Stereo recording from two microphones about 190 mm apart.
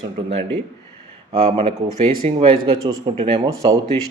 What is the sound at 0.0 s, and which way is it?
Speech, 30° right (ahead or behind).